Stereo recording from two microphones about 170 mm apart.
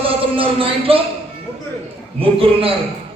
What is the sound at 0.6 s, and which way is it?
Speech, 30° right (ahead or behind).